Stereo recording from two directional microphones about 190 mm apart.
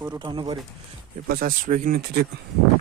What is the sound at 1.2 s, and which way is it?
Speech, 50° right (ahead or behind).